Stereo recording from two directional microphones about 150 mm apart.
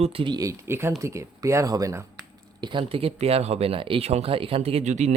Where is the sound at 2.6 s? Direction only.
35° right (ahead or behind).